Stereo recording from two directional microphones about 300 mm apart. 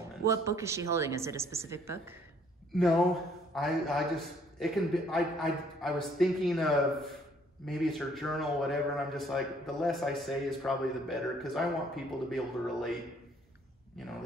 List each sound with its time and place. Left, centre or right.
0.2 s a man's voice: centre